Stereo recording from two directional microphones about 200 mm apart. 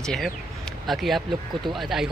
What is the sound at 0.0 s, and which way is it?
Speech, 5° left (ahead or behind).